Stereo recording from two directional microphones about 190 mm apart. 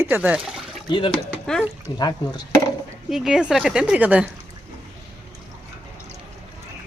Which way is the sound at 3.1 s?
5° right (ahead or behind).